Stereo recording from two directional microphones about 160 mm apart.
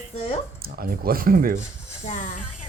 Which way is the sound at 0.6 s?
70° right (ahead or behind).